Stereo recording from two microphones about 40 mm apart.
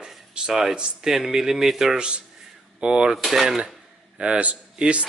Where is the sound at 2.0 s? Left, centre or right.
Right.